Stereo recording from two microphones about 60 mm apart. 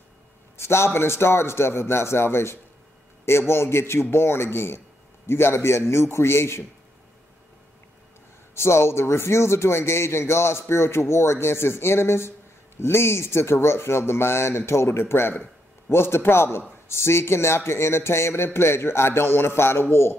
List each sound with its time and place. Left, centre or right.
0.6 s a man's voice: left
8.5 s a man's voice: left